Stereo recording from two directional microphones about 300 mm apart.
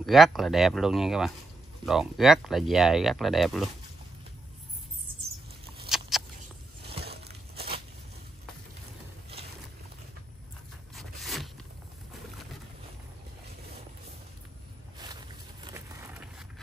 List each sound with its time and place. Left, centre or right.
0.0 s speech: centre
5.9 s mouse: centre
7.1 s crushing: right
11.0 s zipper: centre
15.0 s vehicle: centre